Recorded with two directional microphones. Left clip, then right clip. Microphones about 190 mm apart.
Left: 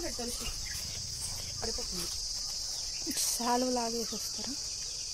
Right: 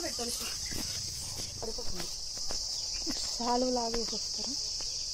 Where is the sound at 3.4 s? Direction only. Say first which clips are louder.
Right 1 dB; 15° left (ahead or behind).